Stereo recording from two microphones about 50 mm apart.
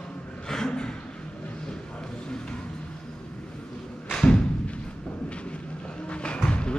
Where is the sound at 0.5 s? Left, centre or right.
Centre.